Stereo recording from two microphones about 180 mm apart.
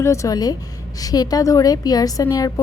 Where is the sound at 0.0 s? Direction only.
15° left (ahead or behind).